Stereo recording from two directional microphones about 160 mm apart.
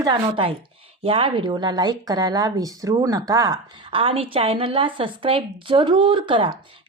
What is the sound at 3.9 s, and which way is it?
A woman's voice, 35° right (ahead or behind).